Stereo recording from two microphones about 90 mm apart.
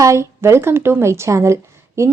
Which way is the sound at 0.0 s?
35° right (ahead or behind).